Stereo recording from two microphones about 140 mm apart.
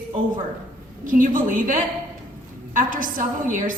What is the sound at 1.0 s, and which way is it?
A woman's voice, 75° right (ahead or behind).